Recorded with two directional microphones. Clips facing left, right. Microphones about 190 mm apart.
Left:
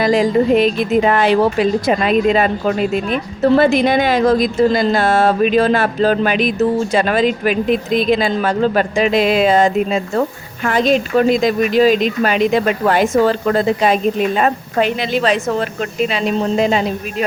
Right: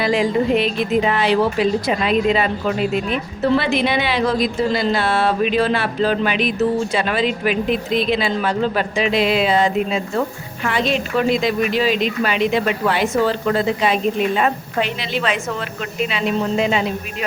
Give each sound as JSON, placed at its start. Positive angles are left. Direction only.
{"t": 0.0, "sound": "speech", "side_deg": 40}